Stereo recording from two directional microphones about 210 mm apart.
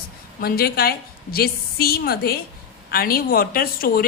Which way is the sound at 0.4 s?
45° left (ahead or behind).